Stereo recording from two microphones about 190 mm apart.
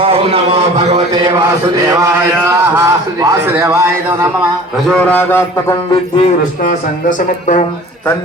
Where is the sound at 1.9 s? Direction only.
15° right (ahead or behind).